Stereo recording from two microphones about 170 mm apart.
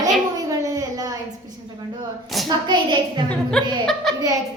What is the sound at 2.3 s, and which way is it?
Hands, centre (ahead or behind).